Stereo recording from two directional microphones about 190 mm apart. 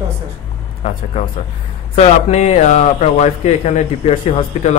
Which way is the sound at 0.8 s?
35° left (ahead or behind).